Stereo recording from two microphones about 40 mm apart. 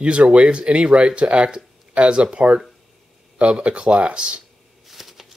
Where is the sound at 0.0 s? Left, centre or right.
Right.